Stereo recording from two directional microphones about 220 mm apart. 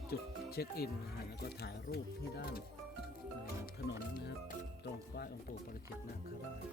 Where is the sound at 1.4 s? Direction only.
45° left (ahead or behind).